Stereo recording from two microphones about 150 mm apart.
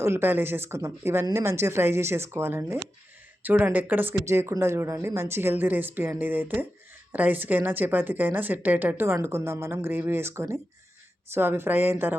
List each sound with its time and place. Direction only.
0.0 s a woman's voice: 15° right (ahead or behind)